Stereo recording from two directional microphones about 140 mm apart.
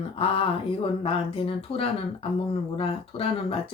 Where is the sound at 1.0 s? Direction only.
40° left (ahead or behind).